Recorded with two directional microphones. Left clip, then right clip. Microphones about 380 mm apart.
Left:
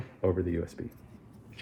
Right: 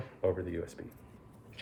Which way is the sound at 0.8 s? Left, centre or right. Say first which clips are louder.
Left 6 dB; centre.